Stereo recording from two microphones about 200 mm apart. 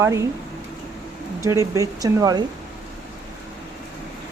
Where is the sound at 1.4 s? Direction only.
15° right (ahead or behind).